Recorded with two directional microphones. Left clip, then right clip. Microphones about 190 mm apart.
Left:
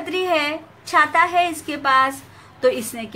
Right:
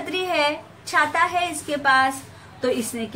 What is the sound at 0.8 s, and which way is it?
A woman's voice, 50° left (ahead or behind).